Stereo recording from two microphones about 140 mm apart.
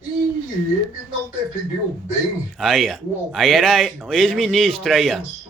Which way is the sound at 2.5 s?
Centre (ahead or behind).